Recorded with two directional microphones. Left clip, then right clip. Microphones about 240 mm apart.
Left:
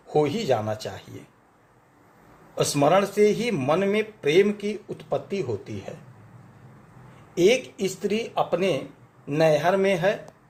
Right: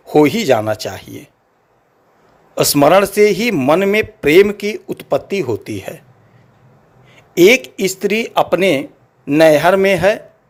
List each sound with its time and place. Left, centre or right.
0.1 s a man's voice: right
2.6 s a man's voice: right
7.3 s a man's voice: right